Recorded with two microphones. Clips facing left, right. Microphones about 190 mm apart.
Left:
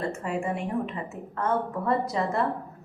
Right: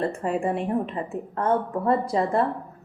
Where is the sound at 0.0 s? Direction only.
35° right (ahead or behind).